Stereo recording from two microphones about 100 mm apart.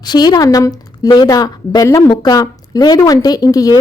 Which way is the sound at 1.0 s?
45° left (ahead or behind).